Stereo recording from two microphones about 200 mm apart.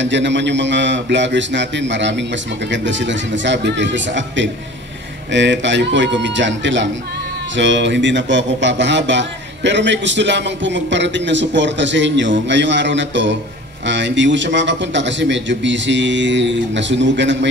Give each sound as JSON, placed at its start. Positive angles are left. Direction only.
{"t": 0.0, "sound": "a man's voice", "side_deg": -65}